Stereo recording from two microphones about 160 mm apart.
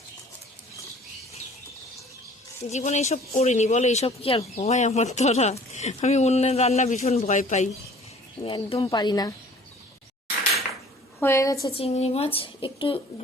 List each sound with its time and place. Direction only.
2.6 s speech: 45° left (ahead or behind)
8.4 s speech: 30° left (ahead or behind)
11.2 s a woman's voice: 15° left (ahead or behind)
11.7 s speech: 40° left (ahead or behind)